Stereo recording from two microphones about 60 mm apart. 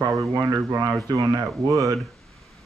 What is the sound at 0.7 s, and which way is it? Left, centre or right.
Speech, right.